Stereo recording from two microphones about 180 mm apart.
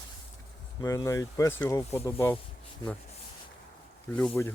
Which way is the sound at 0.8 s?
15° left (ahead or behind).